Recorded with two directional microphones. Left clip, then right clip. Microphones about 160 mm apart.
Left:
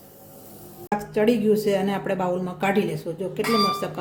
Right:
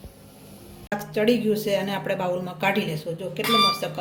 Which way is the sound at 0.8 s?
45° left (ahead or behind).